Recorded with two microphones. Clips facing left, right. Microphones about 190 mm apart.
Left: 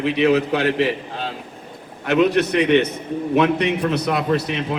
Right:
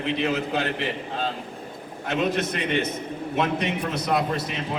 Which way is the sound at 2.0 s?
70° left (ahead or behind).